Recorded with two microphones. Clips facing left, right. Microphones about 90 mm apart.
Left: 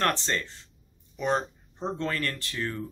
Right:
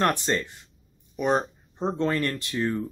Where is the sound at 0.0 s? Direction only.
15° right (ahead or behind).